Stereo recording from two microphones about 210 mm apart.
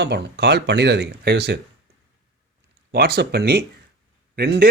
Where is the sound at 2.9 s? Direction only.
50° right (ahead or behind).